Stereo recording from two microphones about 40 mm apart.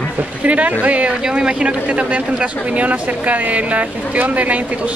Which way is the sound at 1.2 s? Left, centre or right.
Right.